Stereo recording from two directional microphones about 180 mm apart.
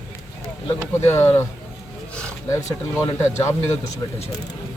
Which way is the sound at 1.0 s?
15° left (ahead or behind).